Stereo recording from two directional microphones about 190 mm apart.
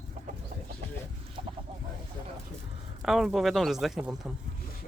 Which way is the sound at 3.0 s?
Centre (ahead or behind).